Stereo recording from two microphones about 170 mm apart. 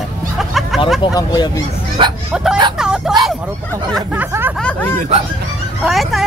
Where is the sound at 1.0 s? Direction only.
25° left (ahead or behind).